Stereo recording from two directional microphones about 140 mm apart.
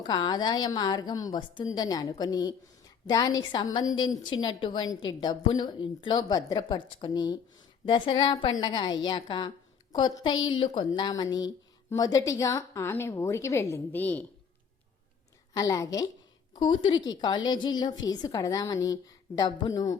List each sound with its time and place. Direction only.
0.1 s a woman's voice: 30° left (ahead or behind); by 14.3 s 10° left (ahead or behind)
15.5 s a woman's voice: 25° left (ahead or behind)